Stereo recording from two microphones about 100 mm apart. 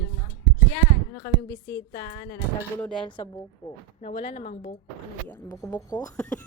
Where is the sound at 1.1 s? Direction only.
30° left (ahead or behind).